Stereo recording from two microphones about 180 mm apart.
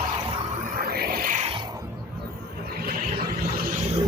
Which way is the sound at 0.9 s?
60° right (ahead or behind).